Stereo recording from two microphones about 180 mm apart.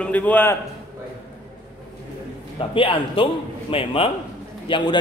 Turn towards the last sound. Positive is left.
turn(degrees=25)  # may be behind; listen again after turning